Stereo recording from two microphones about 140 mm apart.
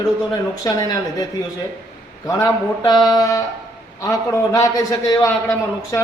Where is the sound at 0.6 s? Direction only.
25° left (ahead or behind).